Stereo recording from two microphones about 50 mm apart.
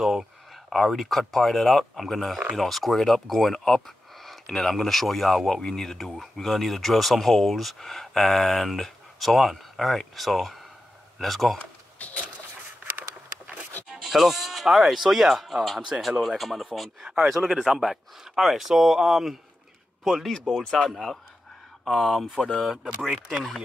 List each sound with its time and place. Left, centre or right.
0.0 s speech: centre
11.5 s a sound: left
13.8 s speech: centre
17.0 s speech: centre
20.2 s speech: centre